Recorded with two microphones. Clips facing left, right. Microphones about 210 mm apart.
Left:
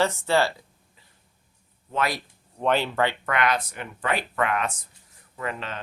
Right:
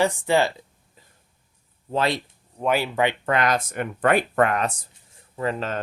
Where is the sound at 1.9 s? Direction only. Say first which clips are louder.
Right 4 dB; 30° right (ahead or behind).